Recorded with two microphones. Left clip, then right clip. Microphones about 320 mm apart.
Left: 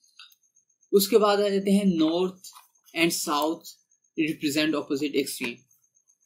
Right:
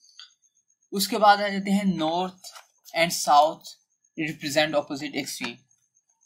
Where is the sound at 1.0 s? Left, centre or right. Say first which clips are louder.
Right 1 dB; right.